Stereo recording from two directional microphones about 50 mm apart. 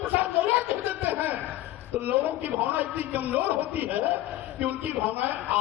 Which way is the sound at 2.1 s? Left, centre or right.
Right.